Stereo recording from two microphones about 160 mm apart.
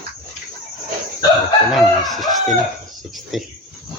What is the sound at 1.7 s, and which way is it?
Speech, centre (ahead or behind).